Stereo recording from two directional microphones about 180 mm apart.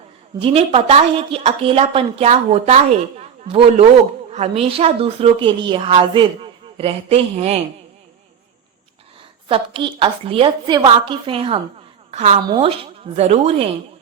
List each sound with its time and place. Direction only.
0.4 s a woman's voice: 35° right (ahead or behind)
9.5 s a woman's voice: 30° right (ahead or behind)